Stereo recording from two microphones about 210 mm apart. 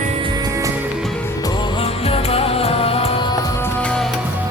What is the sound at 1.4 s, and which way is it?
Music, 20° left (ahead or behind).